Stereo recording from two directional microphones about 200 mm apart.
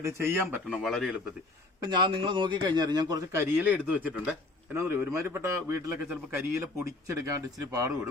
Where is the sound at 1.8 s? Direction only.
25° right (ahead or behind).